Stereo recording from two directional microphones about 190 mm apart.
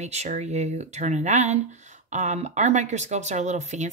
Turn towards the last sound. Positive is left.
turn(degrees=-40)  # may be behind; listen again after turning